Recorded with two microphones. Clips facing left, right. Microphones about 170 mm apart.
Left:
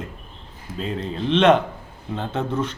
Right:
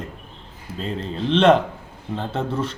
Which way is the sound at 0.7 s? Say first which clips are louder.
Left 1 dB; 35° right (ahead or behind).